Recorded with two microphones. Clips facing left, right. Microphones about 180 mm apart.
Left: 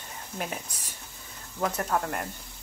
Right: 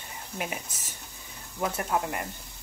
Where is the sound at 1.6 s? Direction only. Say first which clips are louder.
Left 1 dB; 20° right (ahead or behind).